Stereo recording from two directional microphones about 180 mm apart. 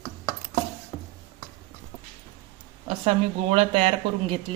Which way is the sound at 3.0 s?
35° right (ahead or behind).